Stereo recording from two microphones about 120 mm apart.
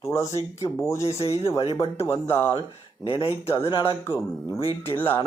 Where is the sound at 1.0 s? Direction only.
60° left (ahead or behind).